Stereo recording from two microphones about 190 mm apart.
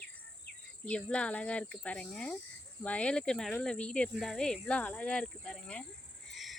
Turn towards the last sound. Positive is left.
turn(degrees=0)  # may be behind; listen again after turning